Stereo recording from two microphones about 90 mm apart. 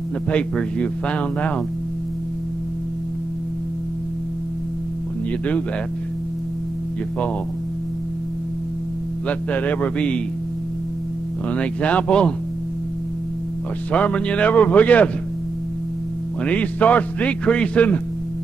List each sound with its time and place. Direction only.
0.3 s speech: 10° left (ahead or behind)
9.3 s speech: 15° left (ahead or behind)
11.5 s speech: 15° left (ahead or behind)
13.9 s speech: 15° left (ahead or behind)
16.4 s speech: 15° left (ahead or behind)